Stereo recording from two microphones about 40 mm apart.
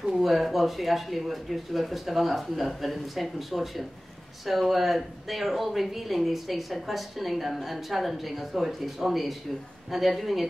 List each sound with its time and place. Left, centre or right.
0.0 s speech: centre